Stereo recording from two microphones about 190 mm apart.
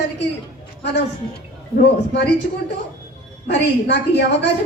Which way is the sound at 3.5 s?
65° left (ahead or behind).